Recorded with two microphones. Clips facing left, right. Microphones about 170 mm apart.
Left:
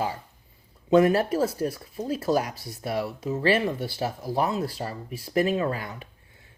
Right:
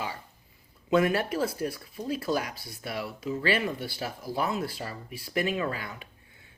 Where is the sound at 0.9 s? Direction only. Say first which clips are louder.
Left 5 dB; 35° left (ahead or behind).